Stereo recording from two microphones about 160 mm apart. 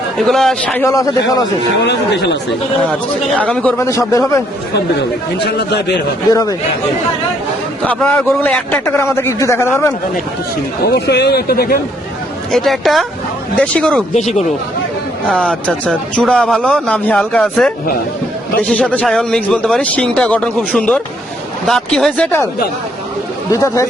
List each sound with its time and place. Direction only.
0.2 s a man's voice: centre (ahead or behind)
0.9 s speech: 20° left (ahead or behind)
1.8 s speech: 90° left
3.3 s a man's voice: 10° left (ahead or behind)
5.5 s speech: 90° left
6.3 s speech: 25° left (ahead or behind)
7.9 s a man's voice: 10° left (ahead or behind)
10.8 s speech: 90° left; by 11.8 s 75° left (ahead or behind)
12.5 s a man's voice: centre (ahead or behind)
14.1 s speech: 45° left (ahead or behind)
15.3 s a man's voice: 5° left (ahead or behind)
23.5 s speech: 20° left (ahead or behind)